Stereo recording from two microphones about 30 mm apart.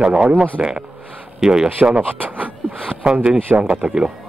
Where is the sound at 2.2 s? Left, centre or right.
Right.